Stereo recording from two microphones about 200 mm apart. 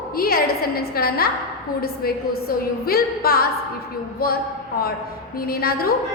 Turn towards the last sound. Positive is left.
turn(degrees=50)  # may be behind; listen again after turning